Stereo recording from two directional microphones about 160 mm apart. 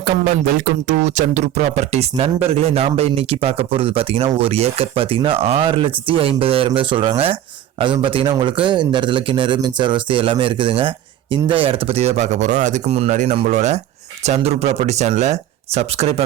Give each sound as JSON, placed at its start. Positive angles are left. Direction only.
{"t": 0.9, "sound": "speech", "side_deg": -45}